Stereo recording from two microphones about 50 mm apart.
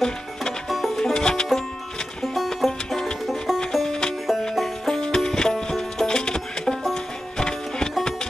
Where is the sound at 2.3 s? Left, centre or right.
Centre.